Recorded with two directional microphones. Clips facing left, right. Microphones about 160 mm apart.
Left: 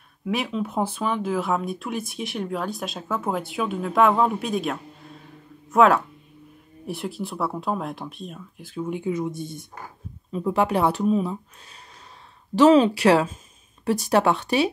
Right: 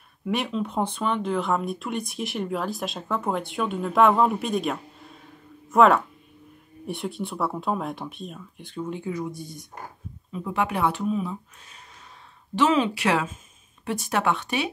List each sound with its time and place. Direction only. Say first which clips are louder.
0.2 s speech: left 1 dB; centre (ahead or behind); by 14.7 s 35° left (ahead or behind)